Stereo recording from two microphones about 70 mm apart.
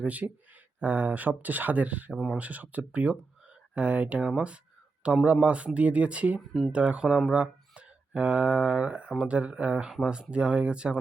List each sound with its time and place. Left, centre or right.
0.0 s speech: right
2.1 s speech: centre
2.4 s speech: right